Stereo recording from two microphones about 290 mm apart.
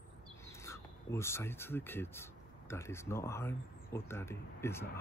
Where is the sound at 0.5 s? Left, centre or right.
Centre.